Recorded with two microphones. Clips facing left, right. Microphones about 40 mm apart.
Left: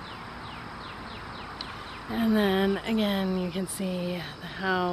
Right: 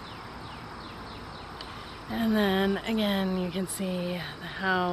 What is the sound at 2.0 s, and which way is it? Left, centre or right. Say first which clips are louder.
Speech: left 1 dB; centre.